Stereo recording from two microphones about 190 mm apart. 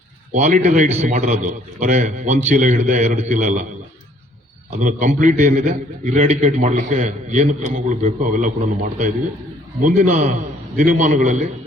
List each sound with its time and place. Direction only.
0.3 s a man's voice: 40° right (ahead or behind)
4.8 s a man's voice: 40° right (ahead or behind)
9.8 s a man's voice: 40° right (ahead or behind)